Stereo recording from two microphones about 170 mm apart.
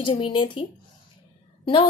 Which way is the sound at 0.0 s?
30° left (ahead or behind).